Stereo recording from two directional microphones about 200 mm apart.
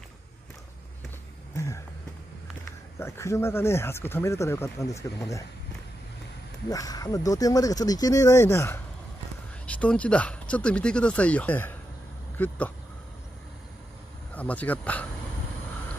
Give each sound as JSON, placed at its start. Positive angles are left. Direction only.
{"t": 3.0, "sound": "speech", "side_deg": 15}
{"t": 6.7, "sound": "speech", "side_deg": 15}
{"t": 14.3, "sound": "speech", "side_deg": 5}